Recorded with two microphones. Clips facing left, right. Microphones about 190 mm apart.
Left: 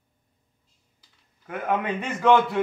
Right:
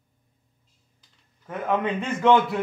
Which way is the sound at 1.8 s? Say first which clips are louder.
Right 2 dB; 5° left (ahead or behind).